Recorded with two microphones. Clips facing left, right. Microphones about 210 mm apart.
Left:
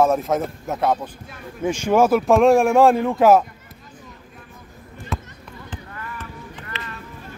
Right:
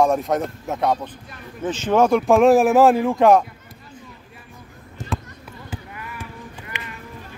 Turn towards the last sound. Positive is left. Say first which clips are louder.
# left 1 dB
turn(degrees=-15)  # may be behind; listen again after turning